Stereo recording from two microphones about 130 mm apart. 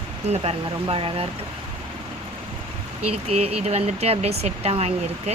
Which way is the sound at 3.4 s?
55° right (ahead or behind).